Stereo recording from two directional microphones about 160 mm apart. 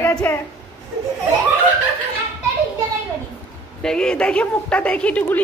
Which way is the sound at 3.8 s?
5° left (ahead or behind).